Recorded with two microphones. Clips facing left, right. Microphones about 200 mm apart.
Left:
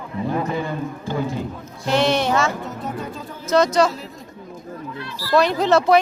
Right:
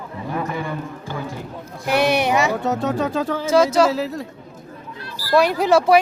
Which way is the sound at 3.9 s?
80° right.